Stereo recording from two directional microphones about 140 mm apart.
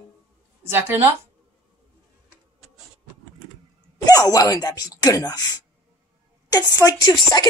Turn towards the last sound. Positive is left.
turn(degrees=30)  # may be behind; listen again after turning